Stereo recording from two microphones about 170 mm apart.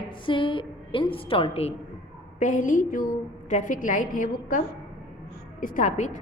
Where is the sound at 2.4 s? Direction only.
50° left (ahead or behind).